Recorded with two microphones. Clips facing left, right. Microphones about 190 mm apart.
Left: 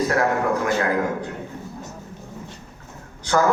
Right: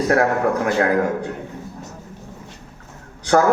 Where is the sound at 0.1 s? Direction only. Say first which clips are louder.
Right 3 dB; 55° right (ahead or behind).